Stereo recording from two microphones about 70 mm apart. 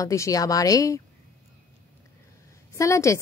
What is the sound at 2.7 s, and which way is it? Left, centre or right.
Speech, left.